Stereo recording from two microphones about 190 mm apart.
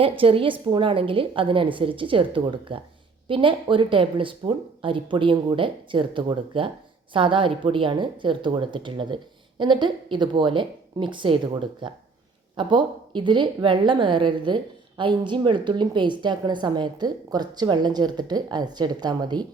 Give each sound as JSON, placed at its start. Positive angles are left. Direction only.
{"t": 0.0, "sound": "a woman's voice", "side_deg": -30}